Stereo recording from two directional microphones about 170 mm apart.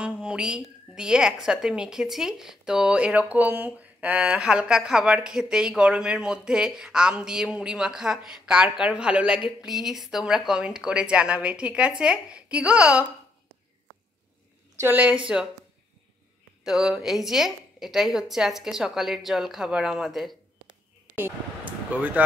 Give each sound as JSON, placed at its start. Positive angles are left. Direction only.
{"t": 0.0, "sound": "a woman's voice", "side_deg": -5}
{"t": 14.8, "sound": "speech", "side_deg": -10}
{"t": 16.6, "sound": "a woman's voice", "side_deg": 0}
{"t": 21.1, "sound": "a sound", "side_deg": -10}